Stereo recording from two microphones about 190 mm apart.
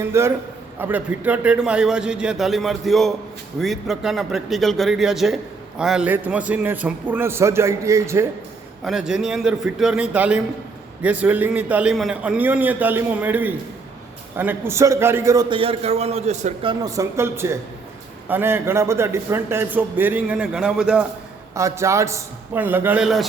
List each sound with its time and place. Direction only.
0.0 s a man's voice: 15° right (ahead or behind)
8.8 s a man's voice: 5° right (ahead or behind); by 16.7 s 35° right (ahead or behind)
16.8 s a man's voice: 15° right (ahead or behind)
21.5 s a man's voice: 15° right (ahead or behind)